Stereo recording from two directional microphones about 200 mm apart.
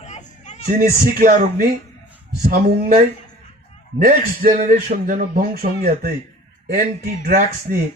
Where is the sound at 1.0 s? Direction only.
40° right (ahead or behind).